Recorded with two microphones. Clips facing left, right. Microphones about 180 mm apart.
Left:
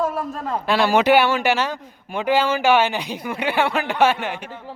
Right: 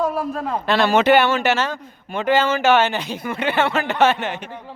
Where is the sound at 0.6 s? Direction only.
10° left (ahead or behind).